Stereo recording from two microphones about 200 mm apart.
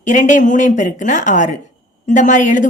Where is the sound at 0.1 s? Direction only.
40° left (ahead or behind).